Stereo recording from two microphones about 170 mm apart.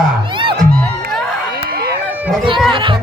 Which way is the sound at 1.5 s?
65° right (ahead or behind).